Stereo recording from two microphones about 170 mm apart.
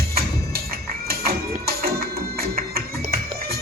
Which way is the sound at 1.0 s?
65° right (ahead or behind).